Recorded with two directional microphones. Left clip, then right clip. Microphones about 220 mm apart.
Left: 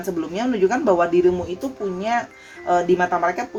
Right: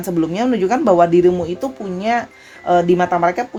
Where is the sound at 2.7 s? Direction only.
40° right (ahead or behind).